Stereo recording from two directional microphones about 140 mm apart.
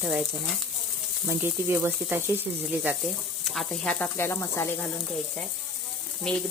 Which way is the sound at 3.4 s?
Centre (ahead or behind).